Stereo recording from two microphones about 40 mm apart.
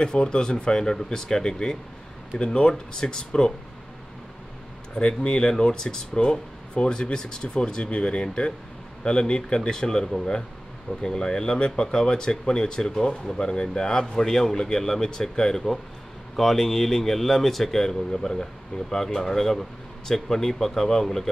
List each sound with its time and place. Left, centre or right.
0.0 s speech: left
4.9 s speech: left